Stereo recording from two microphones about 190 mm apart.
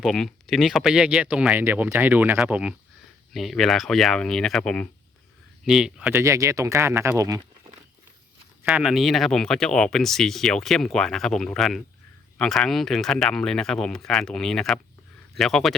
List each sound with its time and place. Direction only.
0.0 s speech: centre (ahead or behind); by 7.4 s 15° right (ahead or behind)
8.6 s speech: 5° right (ahead or behind)